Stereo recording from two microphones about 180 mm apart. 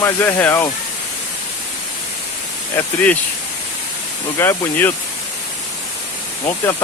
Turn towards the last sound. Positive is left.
turn(degrees=15)  # may be behind; listen again after turning